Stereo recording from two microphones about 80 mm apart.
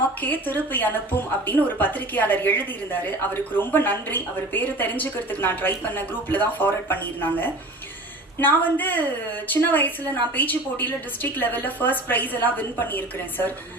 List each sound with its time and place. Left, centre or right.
0.2 s a woman's voice: left